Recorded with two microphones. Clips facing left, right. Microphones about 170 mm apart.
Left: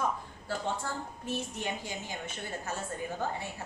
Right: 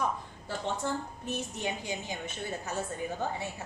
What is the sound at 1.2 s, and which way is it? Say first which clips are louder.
A woman's voice: right 1 dB; 15° right (ahead or behind).